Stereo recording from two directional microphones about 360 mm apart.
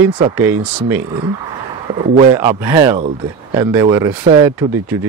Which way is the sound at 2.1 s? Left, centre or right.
Centre.